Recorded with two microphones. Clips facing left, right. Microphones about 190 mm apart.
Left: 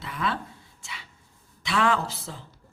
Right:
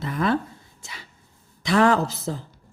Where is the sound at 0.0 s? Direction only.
40° right (ahead or behind).